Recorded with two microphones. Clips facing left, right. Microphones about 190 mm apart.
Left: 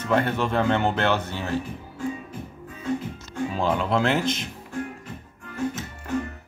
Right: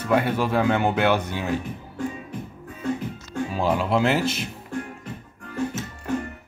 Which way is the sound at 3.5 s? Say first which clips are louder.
Right 1 dB; 5° right (ahead or behind).